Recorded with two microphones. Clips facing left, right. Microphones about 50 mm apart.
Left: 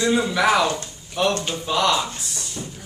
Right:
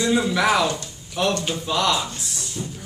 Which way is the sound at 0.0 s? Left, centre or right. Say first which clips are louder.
Left 1 dB; centre.